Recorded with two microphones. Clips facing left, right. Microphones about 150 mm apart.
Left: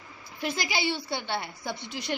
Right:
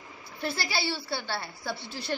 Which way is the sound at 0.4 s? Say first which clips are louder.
Left 2 dB; 15° left (ahead or behind).